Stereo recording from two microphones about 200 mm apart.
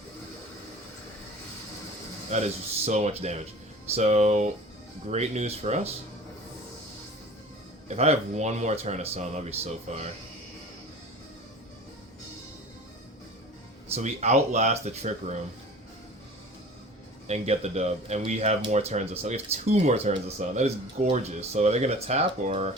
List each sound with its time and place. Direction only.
2.3 s speech: 35° right (ahead or behind)
7.9 s speech: 35° right (ahead or behind)
13.9 s speech: 35° right (ahead or behind)
17.2 s speech: 35° right (ahead or behind)